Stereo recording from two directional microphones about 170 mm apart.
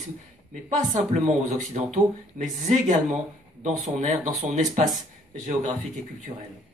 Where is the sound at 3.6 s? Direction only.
40° right (ahead or behind).